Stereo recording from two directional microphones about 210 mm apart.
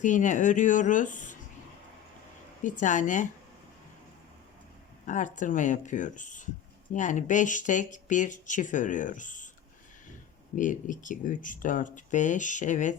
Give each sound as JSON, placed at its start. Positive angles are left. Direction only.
{"t": 0.0, "sound": "speech", "side_deg": 35}
{"t": 2.6, "sound": "speech", "side_deg": 35}
{"t": 5.0, "sound": "speech", "side_deg": 35}
{"t": 10.5, "sound": "speech", "side_deg": 40}